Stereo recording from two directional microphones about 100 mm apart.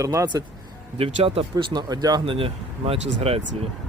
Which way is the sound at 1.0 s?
70° right (ahead or behind).